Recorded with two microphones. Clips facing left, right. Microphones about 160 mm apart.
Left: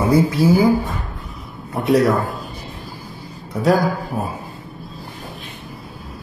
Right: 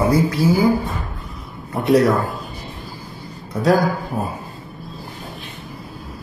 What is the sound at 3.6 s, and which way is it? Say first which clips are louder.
Speech: even; centre (ahead or behind).